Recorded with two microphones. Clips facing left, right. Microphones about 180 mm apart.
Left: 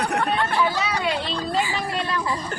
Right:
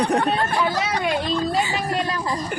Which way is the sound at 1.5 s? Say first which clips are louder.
Right 1 dB; 20° right (ahead or behind).